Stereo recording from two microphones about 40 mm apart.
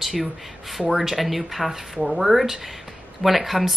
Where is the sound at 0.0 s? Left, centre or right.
Centre.